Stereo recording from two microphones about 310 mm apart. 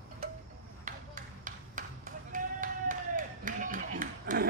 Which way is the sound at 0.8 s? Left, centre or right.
Right.